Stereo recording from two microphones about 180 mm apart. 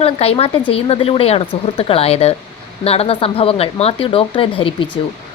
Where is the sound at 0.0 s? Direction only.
35° left (ahead or behind).